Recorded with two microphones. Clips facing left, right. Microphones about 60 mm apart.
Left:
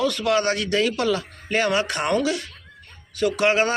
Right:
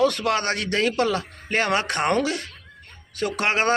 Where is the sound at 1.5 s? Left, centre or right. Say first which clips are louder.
Left 1 dB; right.